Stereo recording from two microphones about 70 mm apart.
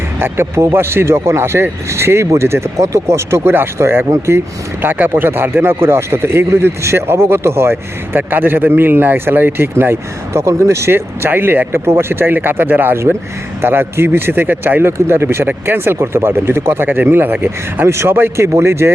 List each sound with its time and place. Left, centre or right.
0.2 s speech: right
17.8 s speech: right